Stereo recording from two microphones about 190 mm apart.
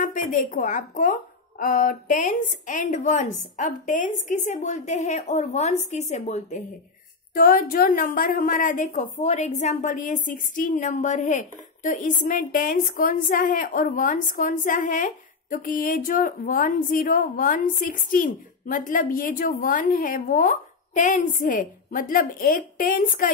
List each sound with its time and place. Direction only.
0.0 s a woman's voice: 45° left (ahead or behind)
7.3 s a woman's voice: 50° left (ahead or behind)